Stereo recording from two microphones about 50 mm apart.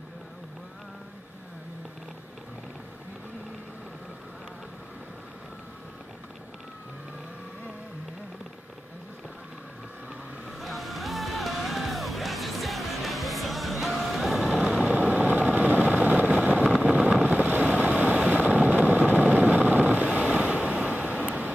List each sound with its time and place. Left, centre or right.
10.6 s music: centre
14.6 s vehicle: centre
16.6 s vehicle: centre
17.3 s vehicle: right